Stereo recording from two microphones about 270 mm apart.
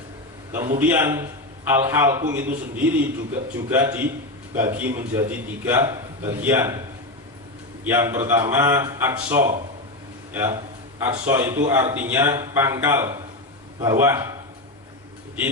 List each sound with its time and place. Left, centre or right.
0.5 s a man's voice: centre
7.9 s a man's voice: centre